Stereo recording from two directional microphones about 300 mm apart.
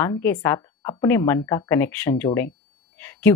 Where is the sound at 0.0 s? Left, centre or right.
Centre.